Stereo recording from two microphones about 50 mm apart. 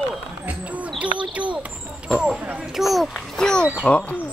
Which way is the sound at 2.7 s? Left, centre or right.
Centre.